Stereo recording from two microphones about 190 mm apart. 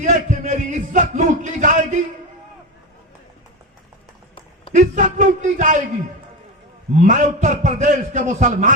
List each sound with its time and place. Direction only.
0.0 s a sound: 40° right (ahead or behind)
4.7 s a man's voice: 40° right (ahead or behind)
7.0 s a man's voice: 40° right (ahead or behind)